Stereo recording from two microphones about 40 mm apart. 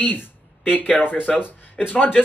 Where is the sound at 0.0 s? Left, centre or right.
Left.